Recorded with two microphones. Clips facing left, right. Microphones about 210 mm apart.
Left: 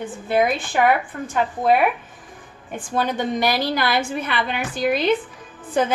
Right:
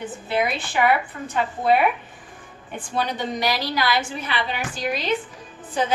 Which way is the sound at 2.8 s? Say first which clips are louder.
Left 3 dB; 50° left (ahead or behind).